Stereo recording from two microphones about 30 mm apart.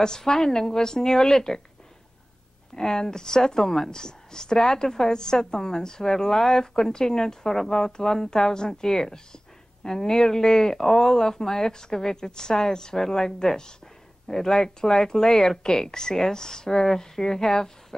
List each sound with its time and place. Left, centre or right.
0.0 s a woman's voice: centre
2.7 s a woman's voice: centre